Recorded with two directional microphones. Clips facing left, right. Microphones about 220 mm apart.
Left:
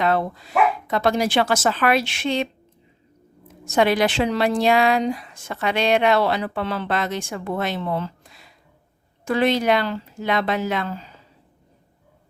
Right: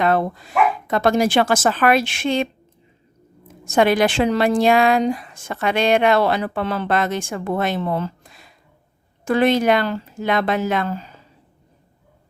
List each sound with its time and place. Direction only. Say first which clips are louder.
0.0 s a woman's voice: right 3 dB; 50° right (ahead or behind)
3.7 s a woman's voice: right 2 dB; 50° right (ahead or behind)